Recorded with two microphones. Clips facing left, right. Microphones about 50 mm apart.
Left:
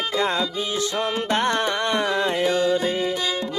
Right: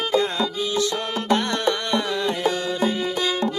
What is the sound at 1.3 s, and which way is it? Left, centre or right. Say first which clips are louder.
Carnatic music: right 2 dB; left.